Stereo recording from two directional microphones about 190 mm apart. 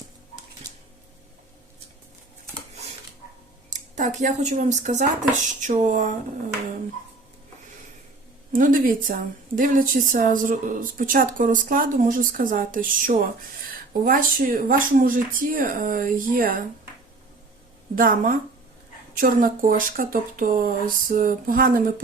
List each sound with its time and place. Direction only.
3.7 s speech: 40° right (ahead or behind)
8.5 s a woman's voice: 45° right (ahead or behind)
17.9 s a woman's voice: 45° right (ahead or behind)